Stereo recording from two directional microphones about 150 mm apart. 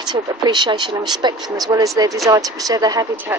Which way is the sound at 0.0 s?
30° right (ahead or behind).